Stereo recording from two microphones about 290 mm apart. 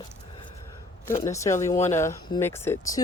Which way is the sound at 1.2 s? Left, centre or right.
Centre.